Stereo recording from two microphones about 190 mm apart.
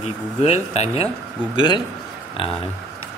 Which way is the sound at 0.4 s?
35° left (ahead or behind).